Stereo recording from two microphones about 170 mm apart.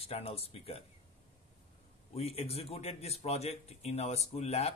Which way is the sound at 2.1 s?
35° left (ahead or behind).